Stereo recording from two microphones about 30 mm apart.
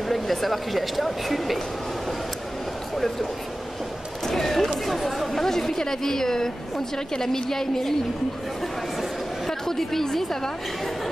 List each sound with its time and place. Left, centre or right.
0.1 s speech: centre
4.4 s a sound: centre
4.8 s chatter: centre
5.4 s a woman's voice: centre
9.5 s chatter: centre
10.0 s a woman's voice: centre